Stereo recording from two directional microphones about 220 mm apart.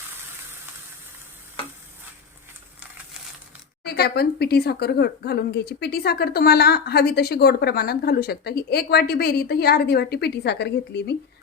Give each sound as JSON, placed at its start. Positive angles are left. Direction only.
{"t": 3.8, "sound": "a woman's voice", "side_deg": 45}